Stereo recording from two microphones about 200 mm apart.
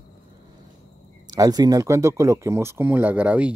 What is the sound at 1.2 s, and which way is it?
Speech, 20° right (ahead or behind).